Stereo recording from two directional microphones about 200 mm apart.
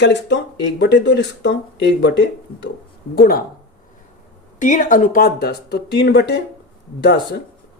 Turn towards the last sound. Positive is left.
turn(degrees=55)  # may be behind; listen again after turning